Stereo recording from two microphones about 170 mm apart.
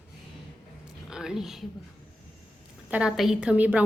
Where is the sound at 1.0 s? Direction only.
5° right (ahead or behind).